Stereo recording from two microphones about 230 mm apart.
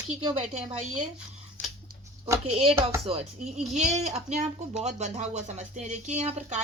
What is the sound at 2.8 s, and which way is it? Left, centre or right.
Speech, right.